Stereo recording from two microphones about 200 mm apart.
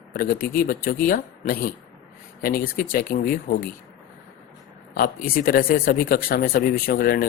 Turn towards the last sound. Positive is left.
turn(degrees=45)  # may be behind; listen again after turning